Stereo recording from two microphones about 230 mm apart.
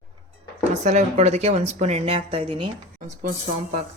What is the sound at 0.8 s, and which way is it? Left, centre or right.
Speech, right.